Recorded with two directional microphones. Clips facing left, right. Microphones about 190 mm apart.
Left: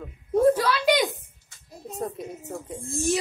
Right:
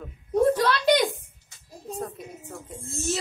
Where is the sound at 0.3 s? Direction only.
10° left (ahead or behind).